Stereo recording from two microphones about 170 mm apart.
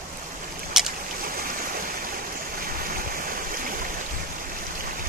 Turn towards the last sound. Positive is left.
turn(degrees=-55)  # may be behind; listen again after turning